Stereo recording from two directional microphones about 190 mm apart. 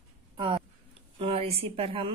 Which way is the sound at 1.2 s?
30° right (ahead or behind).